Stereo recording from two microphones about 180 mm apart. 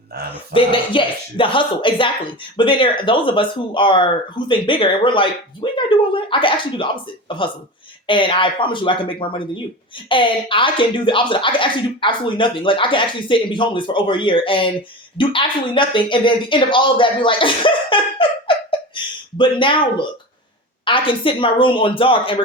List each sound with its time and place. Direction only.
0.5 s speech: 30° left (ahead or behind)